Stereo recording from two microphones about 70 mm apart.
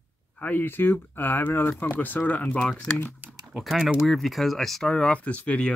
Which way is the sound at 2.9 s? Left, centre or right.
Left.